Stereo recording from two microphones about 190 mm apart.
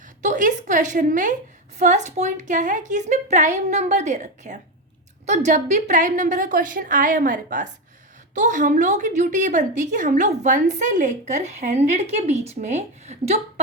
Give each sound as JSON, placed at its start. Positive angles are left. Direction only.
{"t": 0.2, "sound": "a woman's voice", "side_deg": -40}